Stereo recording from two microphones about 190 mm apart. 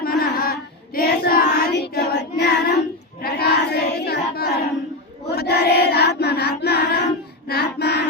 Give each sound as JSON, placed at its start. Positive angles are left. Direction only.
{"t": 0.0, "sound": "child singing", "side_deg": 55}
{"t": 5.3, "sound": "choir", "side_deg": 60}